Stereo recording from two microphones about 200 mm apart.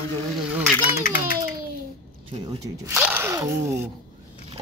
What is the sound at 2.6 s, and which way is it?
Speech, 10° right (ahead or behind).